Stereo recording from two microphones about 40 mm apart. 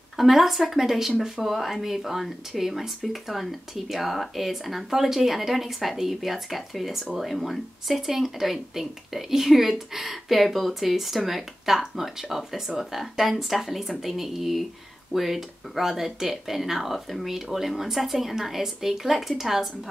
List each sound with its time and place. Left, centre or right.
0.2 s speech: centre